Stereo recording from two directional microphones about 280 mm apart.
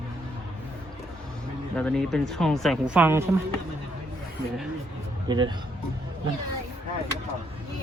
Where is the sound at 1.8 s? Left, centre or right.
Centre.